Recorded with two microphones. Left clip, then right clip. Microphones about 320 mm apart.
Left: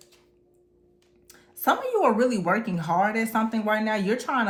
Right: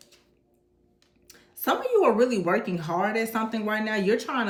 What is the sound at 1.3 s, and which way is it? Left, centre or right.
Speech, centre.